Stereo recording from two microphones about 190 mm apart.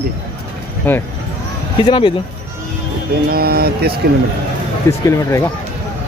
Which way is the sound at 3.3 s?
55° right (ahead or behind).